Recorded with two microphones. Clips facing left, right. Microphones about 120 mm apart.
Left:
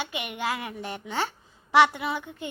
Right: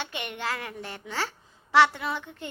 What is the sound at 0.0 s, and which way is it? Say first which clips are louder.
A child's voice: left 2 dB; 10° left (ahead or behind).